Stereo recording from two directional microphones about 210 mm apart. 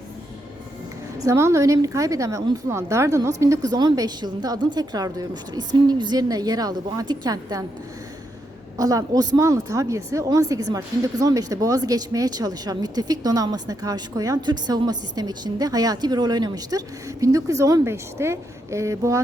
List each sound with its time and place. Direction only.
1.2 s a woman's voice: 15° right (ahead or behind)
8.8 s a woman's voice: 15° right (ahead or behind)